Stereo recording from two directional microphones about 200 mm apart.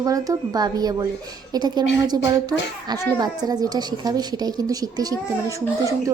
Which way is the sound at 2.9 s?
20° right (ahead or behind).